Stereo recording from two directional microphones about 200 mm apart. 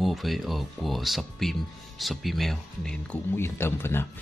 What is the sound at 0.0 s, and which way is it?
Speech, centre (ahead or behind).